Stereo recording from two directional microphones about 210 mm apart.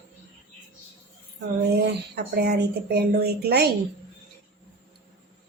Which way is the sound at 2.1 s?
50° right (ahead or behind).